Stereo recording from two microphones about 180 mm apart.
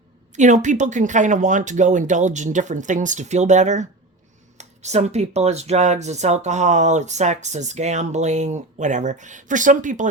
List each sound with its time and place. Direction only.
0.3 s speech: 45° right (ahead or behind)